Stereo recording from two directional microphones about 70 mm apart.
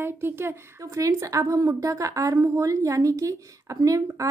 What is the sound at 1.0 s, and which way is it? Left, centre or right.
A woman's voice, right.